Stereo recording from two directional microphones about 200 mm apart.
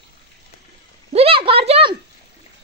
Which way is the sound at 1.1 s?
30° right (ahead or behind).